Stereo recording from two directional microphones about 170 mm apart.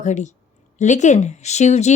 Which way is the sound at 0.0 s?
45° left (ahead or behind).